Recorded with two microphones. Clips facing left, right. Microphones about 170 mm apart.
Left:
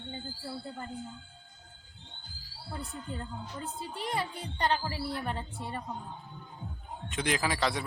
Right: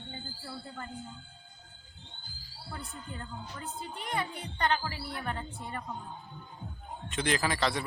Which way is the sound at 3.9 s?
30° left (ahead or behind).